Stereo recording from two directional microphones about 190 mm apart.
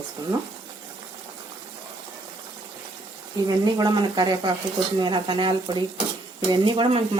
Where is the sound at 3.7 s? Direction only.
25° right (ahead or behind).